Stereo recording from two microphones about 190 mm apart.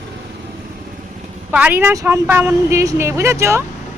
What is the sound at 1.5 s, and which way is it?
A woman's voice, 10° right (ahead or behind).